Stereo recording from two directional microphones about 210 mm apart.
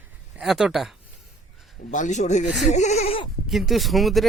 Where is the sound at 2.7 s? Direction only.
35° left (ahead or behind).